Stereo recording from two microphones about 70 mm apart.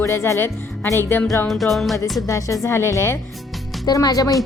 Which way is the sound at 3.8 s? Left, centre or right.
Left.